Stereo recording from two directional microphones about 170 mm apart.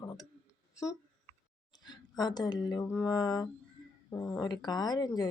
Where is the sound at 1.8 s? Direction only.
25° left (ahead or behind).